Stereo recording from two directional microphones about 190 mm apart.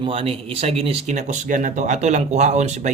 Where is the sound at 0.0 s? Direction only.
30° right (ahead or behind).